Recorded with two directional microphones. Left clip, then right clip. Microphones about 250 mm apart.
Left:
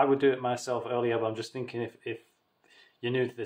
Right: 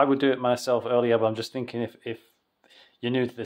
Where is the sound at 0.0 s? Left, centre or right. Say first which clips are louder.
Right 3 dB; right.